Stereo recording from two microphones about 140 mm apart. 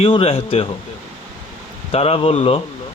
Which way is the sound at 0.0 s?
45° left (ahead or behind).